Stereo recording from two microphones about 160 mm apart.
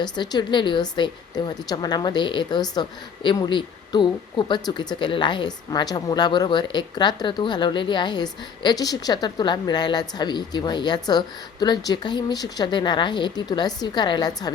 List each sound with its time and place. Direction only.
0.0 s speech: 25° left (ahead or behind)